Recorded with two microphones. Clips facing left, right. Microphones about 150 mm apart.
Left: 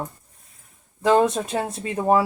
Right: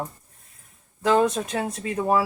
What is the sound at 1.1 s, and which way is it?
Speech, 30° left (ahead or behind).